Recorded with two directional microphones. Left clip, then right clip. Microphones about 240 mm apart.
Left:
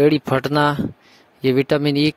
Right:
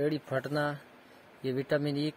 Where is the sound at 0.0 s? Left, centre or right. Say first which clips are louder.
Left 15 dB; left.